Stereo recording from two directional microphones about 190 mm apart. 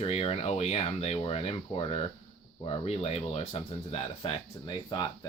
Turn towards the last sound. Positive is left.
turn(degrees=25)  # may be behind; listen again after turning